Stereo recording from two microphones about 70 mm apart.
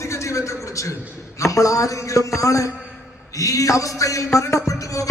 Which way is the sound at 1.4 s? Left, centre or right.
Left.